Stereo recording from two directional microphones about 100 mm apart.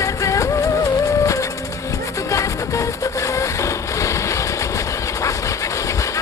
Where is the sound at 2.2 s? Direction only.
30° left (ahead or behind).